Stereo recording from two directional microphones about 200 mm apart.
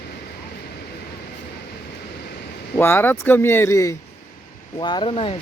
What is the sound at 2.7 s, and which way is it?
Speech, 10° left (ahead or behind).